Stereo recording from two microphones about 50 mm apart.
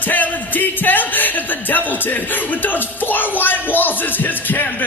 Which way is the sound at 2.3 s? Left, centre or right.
Left.